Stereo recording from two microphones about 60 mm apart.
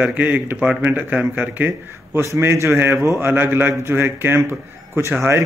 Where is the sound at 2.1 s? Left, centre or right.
Right.